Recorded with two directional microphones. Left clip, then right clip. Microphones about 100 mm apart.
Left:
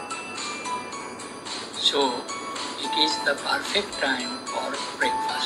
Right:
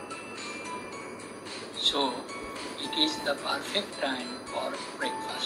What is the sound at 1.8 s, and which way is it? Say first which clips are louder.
Music: left 5 dB; 15° left (ahead or behind).